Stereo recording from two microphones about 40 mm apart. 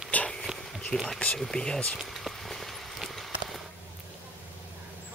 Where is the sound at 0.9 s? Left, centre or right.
Left.